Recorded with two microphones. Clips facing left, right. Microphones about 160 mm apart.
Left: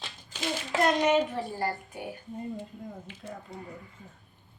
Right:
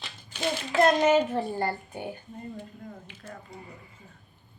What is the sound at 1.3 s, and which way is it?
Speech, 35° right (ahead or behind).